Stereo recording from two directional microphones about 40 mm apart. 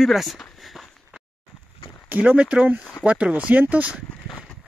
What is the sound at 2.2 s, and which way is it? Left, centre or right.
Speech, right.